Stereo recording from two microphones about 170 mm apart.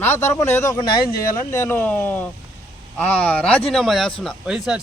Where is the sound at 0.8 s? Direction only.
60° left (ahead or behind).